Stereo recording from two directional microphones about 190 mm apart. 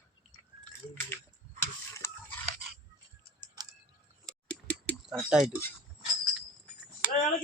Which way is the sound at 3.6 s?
20° right (ahead or behind).